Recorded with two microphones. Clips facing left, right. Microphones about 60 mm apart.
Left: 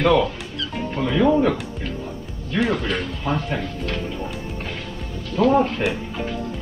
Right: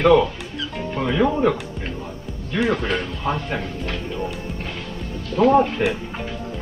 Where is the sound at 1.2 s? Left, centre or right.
Right.